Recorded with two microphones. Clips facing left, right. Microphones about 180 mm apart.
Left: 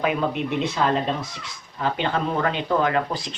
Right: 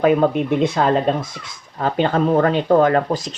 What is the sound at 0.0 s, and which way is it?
Speech, 45° right (ahead or behind).